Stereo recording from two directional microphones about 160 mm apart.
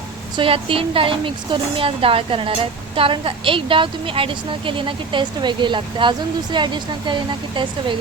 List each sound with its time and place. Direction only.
0.3 s speech: 35° right (ahead or behind)